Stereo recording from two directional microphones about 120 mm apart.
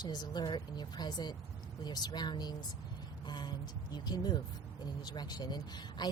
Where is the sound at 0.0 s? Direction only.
35° left (ahead or behind).